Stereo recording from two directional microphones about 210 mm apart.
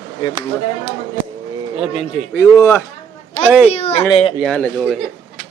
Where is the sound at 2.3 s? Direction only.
15° left (ahead or behind).